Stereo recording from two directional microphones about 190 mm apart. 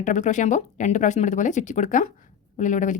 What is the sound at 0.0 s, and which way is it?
Speech, 40° left (ahead or behind).